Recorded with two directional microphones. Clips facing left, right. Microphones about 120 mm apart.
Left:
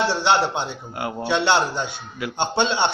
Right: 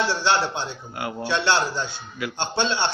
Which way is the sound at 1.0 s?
20° left (ahead or behind).